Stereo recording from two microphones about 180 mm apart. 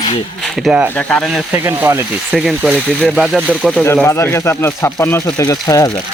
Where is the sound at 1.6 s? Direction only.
15° right (ahead or behind).